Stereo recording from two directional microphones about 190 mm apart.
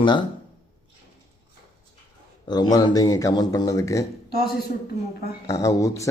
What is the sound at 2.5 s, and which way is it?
A man's voice, 20° left (ahead or behind).